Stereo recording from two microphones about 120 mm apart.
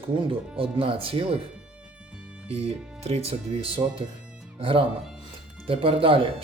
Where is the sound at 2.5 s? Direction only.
60° right (ahead or behind).